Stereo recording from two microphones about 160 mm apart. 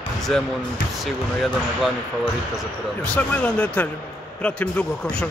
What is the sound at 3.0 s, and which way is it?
Speech, 10° left (ahead or behind).